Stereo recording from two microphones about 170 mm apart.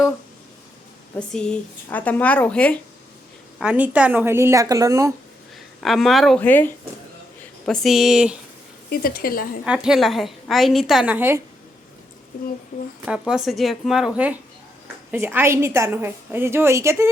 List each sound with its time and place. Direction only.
1.3 s speech: 5° left (ahead or behind)
3.6 s a woman's voice: 5° right (ahead or behind)
5.8 s a woman's voice: centre (ahead or behind)
6.4 s a woman's voice: 10° left (ahead or behind); by 8.4 s 5° right (ahead or behind)
8.9 s speech: 60° left (ahead or behind)
9.6 s a woman's voice: 5° right (ahead or behind)
13.1 s a woman's voice: 5° right (ahead or behind)